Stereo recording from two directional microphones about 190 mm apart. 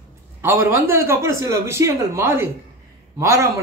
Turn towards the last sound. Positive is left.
turn(degrees=-15)  # may be behind; listen again after turning